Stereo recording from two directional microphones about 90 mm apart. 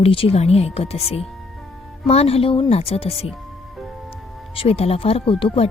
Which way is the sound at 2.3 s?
90° left.